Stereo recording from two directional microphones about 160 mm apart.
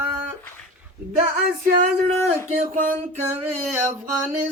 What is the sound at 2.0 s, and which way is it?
Speech, 45° right (ahead or behind).